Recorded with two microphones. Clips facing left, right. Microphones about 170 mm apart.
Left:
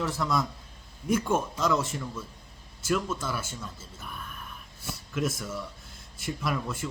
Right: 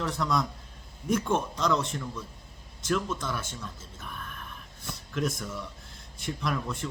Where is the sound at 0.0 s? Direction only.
5° left (ahead or behind).